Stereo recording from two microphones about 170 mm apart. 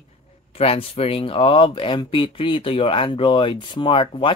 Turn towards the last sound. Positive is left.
turn(degrees=30)  # may be behind; listen again after turning